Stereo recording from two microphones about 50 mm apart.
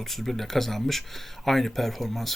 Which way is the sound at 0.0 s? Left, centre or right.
Centre.